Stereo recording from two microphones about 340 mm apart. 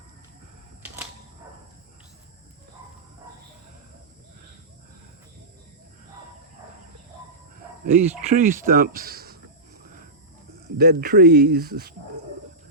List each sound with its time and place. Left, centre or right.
7.9 s speech: right
10.8 s speech: right